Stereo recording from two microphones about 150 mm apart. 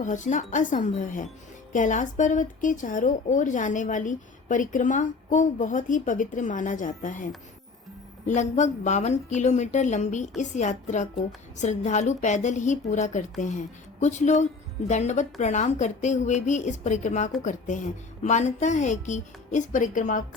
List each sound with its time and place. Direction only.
0.0 s speech: 55° left (ahead or behind)
8.3 s speech: 50° left (ahead or behind)